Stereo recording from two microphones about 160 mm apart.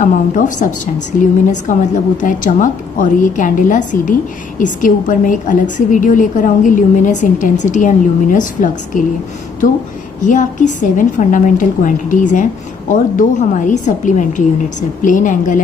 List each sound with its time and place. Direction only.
0.0 s a woman's voice: 50° left (ahead or behind)
10.2 s a woman's voice: 50° left (ahead or behind)